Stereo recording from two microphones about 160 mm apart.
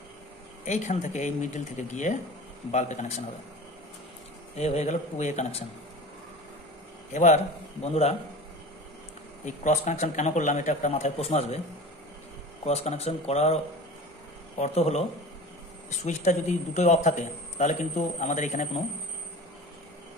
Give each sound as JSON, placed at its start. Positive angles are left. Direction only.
{"t": 0.7, "sound": "a man's voice", "side_deg": 50}
{"t": 4.6, "sound": "a man's voice", "side_deg": 45}
{"t": 7.1, "sound": "a man's voice", "side_deg": 50}
{"t": 9.4, "sound": "a man's voice", "side_deg": 50}
{"t": 12.6, "sound": "a man's voice", "side_deg": 45}
{"t": 14.6, "sound": "a man's voice", "side_deg": 40}